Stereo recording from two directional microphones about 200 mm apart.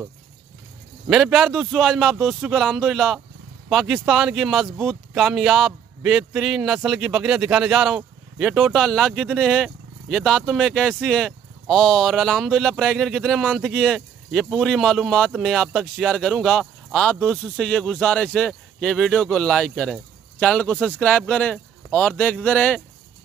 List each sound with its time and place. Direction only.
1.0 s speech: centre (ahead or behind)